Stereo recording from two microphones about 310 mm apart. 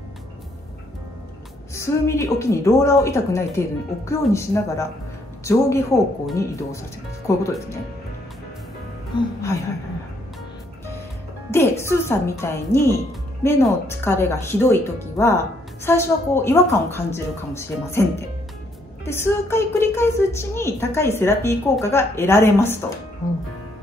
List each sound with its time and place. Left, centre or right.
1.8 s a woman's voice: centre
9.1 s a woman's voice: centre
11.8 s a woman's voice: centre
19.0 s a woman's voice: centre